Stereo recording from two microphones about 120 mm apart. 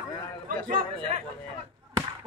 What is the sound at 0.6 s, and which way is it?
Speech, 90° right.